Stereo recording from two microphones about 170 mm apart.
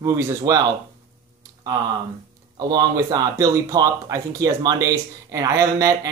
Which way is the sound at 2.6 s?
20° right (ahead or behind).